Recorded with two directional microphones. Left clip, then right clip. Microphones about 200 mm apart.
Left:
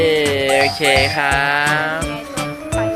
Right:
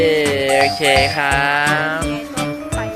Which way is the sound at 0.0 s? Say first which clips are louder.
Even; 5° right (ahead or behind).